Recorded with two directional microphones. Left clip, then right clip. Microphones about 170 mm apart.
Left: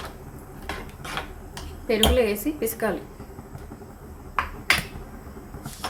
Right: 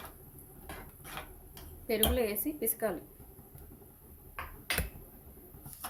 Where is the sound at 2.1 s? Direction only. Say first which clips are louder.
Left 10 dB; 15° right (ahead or behind).